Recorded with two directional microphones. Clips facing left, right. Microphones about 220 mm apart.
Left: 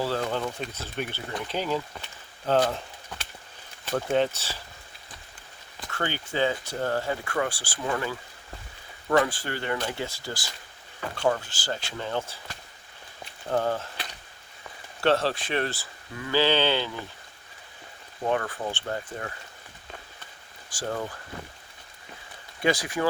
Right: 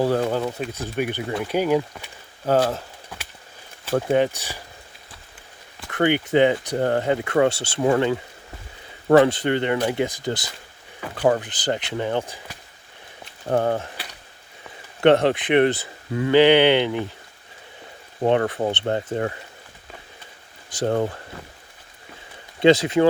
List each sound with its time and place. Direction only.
0.0 s speech: 15° right (ahead or behind)
2.5 s a sound: 5° right (ahead or behind)
4.1 s speech: 15° right (ahead or behind)
5.9 s speech: 20° right (ahead or behind)
9.2 s speech: 20° right (ahead or behind)
13.5 s speech: 50° right (ahead or behind)
13.7 s a sound: 10° right (ahead or behind)
15.0 s speech: 20° right (ahead or behind)
18.3 s speech: 25° right (ahead or behind)
20.7 s speech: 20° right (ahead or behind)
20.9 s speech: 35° right (ahead or behind)
22.6 s speech: 25° right (ahead or behind)